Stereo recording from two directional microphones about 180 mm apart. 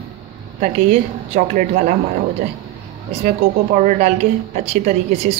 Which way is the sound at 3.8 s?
45° right (ahead or behind).